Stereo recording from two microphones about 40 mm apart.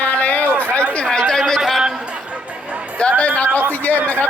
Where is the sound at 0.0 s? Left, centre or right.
Left.